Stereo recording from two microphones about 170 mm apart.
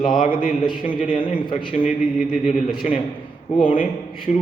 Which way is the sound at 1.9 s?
45° left (ahead or behind).